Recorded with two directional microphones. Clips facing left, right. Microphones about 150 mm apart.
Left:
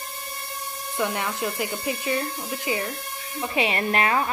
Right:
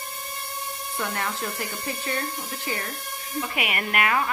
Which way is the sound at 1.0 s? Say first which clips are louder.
Left 4 dB; 15° left (ahead or behind).